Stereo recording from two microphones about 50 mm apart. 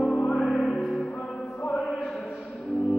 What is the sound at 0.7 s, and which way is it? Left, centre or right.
Music, centre.